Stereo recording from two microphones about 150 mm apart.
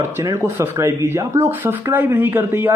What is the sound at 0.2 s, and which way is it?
Speech, 20° right (ahead or behind).